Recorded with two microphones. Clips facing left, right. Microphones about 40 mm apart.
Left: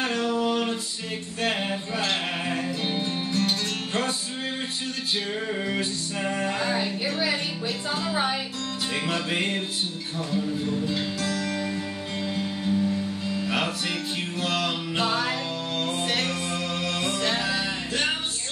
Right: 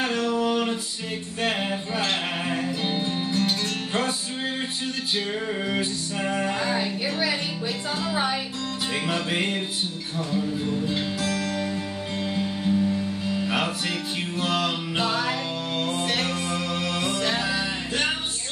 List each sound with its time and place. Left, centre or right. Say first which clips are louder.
0.5 s music: right 1 dB; centre
6.2 s music: right 1 dB; centre
7.6 s speech: even; centre
8.9 s music: right 1 dB; centre
11.2 s music: right 1 dB; centre
15.0 s music: even; centre
15.7 s music: right 1 dB; centre